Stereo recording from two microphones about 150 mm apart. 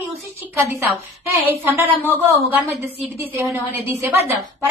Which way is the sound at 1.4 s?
15° right (ahead or behind).